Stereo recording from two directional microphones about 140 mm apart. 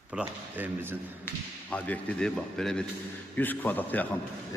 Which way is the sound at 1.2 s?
10° left (ahead or behind).